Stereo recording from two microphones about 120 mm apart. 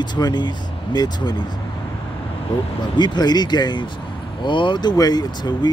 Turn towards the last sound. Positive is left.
turn(degrees=35)  # may be behind; listen again after turning